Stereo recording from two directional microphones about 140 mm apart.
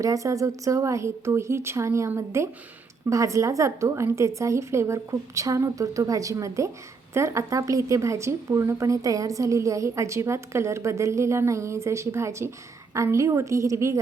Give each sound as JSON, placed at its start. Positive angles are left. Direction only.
{"t": 0.0, "sound": "a woman's voice", "side_deg": -25}